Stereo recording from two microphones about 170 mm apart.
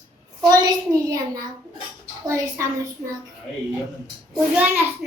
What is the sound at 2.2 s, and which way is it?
Child singing, 15° right (ahead or behind).